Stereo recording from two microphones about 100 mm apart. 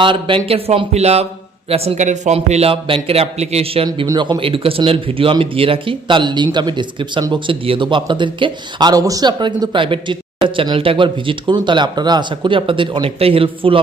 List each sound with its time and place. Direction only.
0.0 s a man's voice: 55° right (ahead or behind); by 3.8 s 85° right
4.2 s speech: 60° right (ahead or behind)
8.9 s a man's voice: 35° right (ahead or behind)
9.4 s speech: 55° right (ahead or behind)